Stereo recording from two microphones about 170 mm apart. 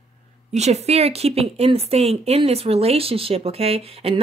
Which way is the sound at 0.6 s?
40° right (ahead or behind).